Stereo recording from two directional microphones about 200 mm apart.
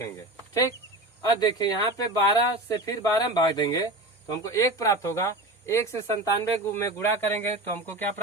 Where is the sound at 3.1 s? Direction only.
20° left (ahead or behind).